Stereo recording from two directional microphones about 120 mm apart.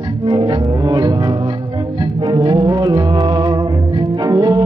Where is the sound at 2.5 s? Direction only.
30° right (ahead or behind).